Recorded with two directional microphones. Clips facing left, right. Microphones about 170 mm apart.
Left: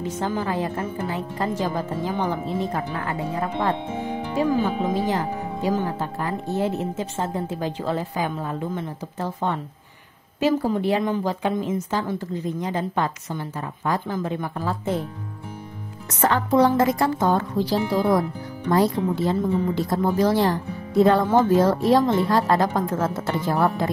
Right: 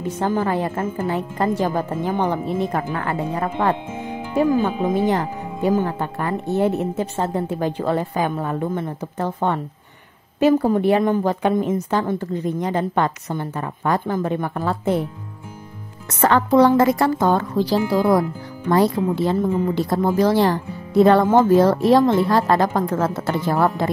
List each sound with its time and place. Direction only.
0.0 s speech: 55° right (ahead or behind)
4.9 s speech: 60° right (ahead or behind)
16.2 s speech: 70° right (ahead or behind)
18.7 s speech: 70° right (ahead or behind)
21.4 s speech: 65° right (ahead or behind)